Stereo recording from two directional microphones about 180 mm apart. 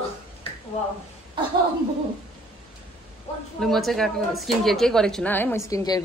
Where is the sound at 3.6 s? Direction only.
Centre (ahead or behind).